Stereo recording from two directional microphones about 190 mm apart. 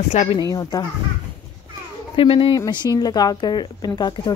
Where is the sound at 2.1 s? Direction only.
30° left (ahead or behind).